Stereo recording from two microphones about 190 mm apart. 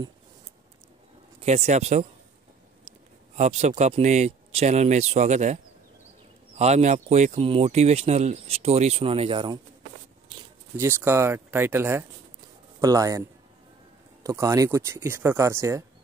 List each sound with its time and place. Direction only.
1.4 s speech: 35° right (ahead or behind)
3.3 s speech: 35° right (ahead or behind)
10.8 s speech: 15° right (ahead or behind)